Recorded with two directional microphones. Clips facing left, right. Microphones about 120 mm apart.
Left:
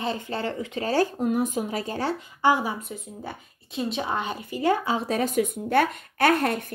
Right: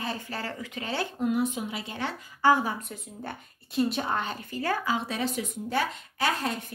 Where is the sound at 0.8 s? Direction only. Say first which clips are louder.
Left 6 dB; 40° left (ahead or behind).